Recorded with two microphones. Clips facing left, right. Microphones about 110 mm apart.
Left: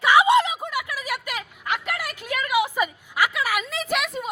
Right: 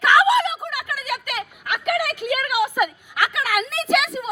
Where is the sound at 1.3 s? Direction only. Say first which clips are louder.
Right 1 dB; 60° right (ahead or behind).